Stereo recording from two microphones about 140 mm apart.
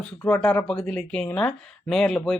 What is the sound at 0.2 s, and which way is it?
Speech, 10° left (ahead or behind).